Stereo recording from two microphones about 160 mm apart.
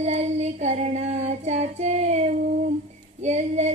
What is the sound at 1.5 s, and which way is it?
Child singing, 45° right (ahead or behind).